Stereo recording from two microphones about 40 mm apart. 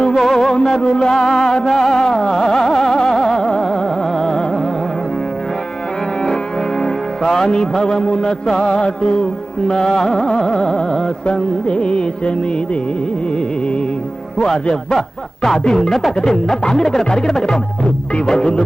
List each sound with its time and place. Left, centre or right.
0.1 s music: centre
4.2 s music: centre
6.8 s music: centre
9.6 s carnatic music: centre
14.4 s carnatic music: centre